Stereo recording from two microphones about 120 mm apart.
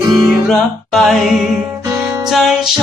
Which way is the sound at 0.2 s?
Centre (ahead or behind).